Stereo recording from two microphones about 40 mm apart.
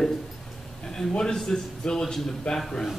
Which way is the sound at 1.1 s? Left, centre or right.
Centre.